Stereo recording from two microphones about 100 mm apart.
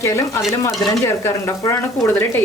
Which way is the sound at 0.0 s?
25° left (ahead or behind).